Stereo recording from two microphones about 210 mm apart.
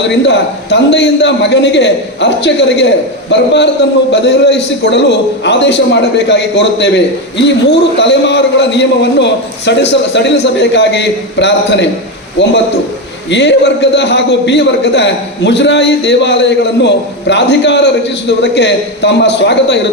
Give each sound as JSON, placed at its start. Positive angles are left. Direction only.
{"t": 0.3, "sound": "a man's voice", "side_deg": 55}